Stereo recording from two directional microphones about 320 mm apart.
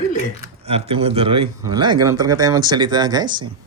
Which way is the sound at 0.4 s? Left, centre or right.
Centre.